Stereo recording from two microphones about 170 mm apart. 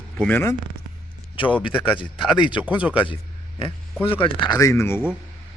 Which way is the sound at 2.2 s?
10° right (ahead or behind).